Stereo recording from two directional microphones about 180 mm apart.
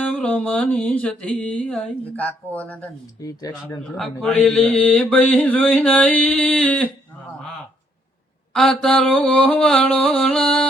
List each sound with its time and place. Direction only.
0.0 s speech: 10° left (ahead or behind)
3.2 s speech: 20° left (ahead or behind)
3.8 s speech: 5° left (ahead or behind)
8.5 s mantra: centre (ahead or behind)